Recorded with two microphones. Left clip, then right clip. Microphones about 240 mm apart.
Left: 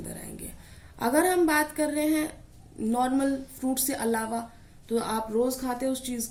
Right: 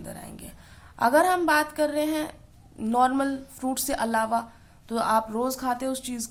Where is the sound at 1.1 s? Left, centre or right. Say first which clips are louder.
Right 2 dB; right.